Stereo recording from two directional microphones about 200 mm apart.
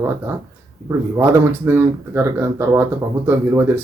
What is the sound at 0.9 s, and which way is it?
Speech, 10° right (ahead or behind).